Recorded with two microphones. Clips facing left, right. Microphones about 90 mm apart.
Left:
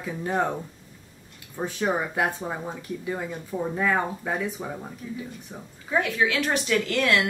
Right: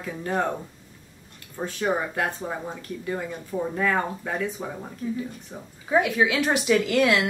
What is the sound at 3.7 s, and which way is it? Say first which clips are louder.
Speech: even; 10° left (ahead or behind).